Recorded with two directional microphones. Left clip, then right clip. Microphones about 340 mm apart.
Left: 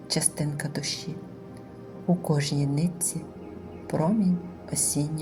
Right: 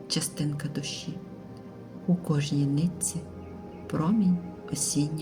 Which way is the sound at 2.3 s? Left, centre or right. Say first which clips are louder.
Left 1 dB; centre.